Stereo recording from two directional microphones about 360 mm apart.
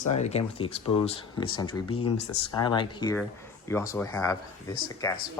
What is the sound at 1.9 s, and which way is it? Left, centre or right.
Speech, left.